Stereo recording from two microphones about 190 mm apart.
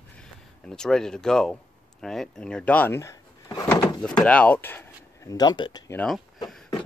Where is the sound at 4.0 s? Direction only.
5° left (ahead or behind).